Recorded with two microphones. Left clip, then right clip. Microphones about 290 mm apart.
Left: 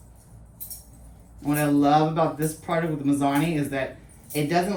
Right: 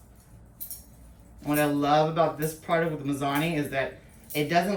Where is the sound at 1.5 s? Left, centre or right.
Centre.